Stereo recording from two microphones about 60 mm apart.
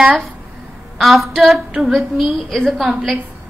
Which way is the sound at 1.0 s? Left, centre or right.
Centre.